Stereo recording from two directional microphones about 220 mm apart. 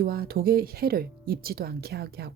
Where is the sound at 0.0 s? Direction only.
45° right (ahead or behind).